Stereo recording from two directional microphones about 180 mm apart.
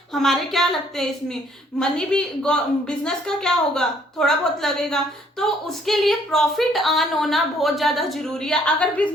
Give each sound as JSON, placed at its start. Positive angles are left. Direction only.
{"t": 0.1, "sound": "a woman's voice", "side_deg": 0}